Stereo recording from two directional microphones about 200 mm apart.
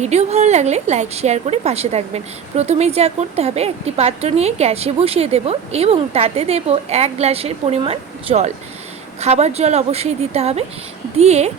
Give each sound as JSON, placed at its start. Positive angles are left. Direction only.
{"t": 0.0, "sound": "a woman's voice", "side_deg": -35}